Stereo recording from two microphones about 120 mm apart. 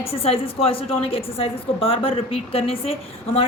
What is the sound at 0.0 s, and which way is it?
A woman's voice, 55° left (ahead or behind).